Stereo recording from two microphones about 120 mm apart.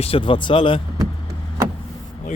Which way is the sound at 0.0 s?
50° left (ahead or behind).